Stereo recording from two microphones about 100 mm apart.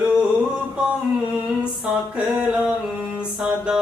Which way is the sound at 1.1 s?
5° right (ahead or behind).